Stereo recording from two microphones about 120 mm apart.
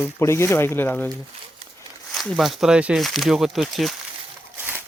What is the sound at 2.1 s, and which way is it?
Speech, centre (ahead or behind).